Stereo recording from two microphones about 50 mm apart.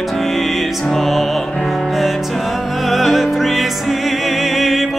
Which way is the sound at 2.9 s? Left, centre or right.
Centre.